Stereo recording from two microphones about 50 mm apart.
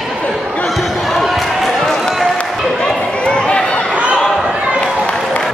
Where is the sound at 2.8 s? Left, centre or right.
Centre.